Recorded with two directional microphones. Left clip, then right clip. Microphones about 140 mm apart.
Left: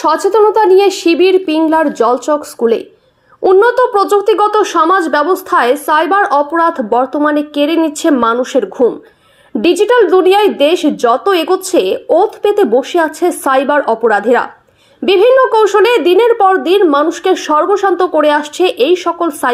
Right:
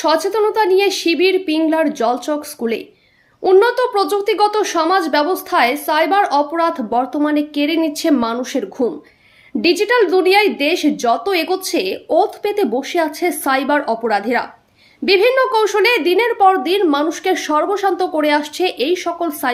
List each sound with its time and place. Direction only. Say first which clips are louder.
0.0 s speech: left 6 dB; 15° left (ahead or behind)
19.1 s speech: left 6 dB; centre (ahead or behind)